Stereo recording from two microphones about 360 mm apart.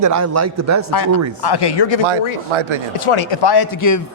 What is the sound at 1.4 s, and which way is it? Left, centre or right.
Speech, left.